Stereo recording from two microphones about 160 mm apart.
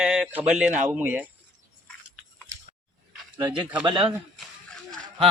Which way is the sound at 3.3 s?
25° right (ahead or behind).